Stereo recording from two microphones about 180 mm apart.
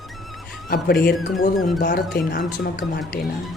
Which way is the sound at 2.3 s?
60° left (ahead or behind).